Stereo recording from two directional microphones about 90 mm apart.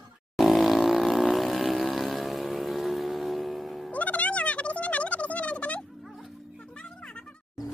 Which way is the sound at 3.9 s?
15° left (ahead or behind).